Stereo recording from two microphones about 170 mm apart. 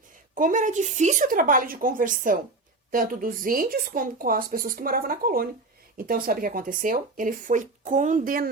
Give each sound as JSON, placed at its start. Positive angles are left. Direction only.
{"t": 0.3, "sound": "speech", "side_deg": -50}